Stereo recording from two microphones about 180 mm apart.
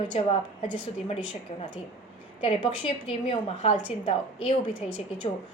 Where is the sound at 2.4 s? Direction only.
30° left (ahead or behind).